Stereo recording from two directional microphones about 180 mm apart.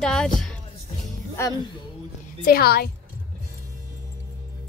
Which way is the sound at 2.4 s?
60° left (ahead or behind).